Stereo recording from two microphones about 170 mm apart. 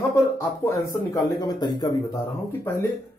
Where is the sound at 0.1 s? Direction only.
15° left (ahead or behind).